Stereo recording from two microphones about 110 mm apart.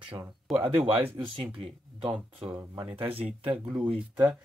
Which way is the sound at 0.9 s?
65° right (ahead or behind).